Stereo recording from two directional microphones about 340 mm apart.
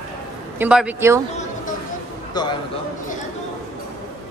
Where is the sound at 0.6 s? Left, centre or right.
Centre.